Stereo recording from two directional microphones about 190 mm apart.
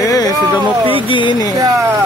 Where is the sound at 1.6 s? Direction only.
15° right (ahead or behind).